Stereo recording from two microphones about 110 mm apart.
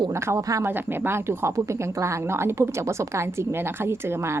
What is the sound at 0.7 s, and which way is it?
A woman's voice, 20° right (ahead or behind).